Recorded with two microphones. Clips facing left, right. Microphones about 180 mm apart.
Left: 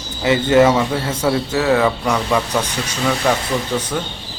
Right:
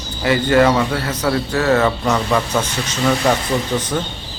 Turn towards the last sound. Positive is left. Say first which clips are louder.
# right 1 dB
turn(degrees=0)  # may be behind; listen again after turning